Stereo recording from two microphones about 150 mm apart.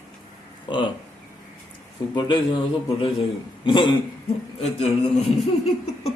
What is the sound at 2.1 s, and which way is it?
Speech, 30° left (ahead or behind).